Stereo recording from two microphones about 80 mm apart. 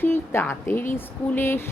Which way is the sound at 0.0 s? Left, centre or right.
Left.